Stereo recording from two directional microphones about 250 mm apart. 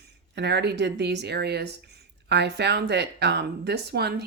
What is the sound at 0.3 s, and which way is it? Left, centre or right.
Speech, right.